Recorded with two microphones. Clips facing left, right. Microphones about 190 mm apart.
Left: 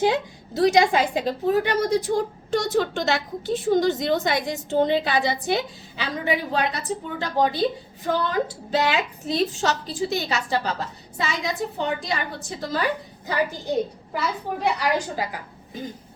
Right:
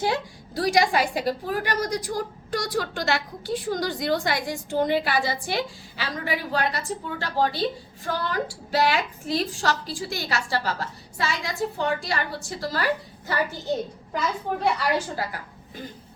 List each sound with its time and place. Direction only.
0.0 s a woman's voice: 20° left (ahead or behind)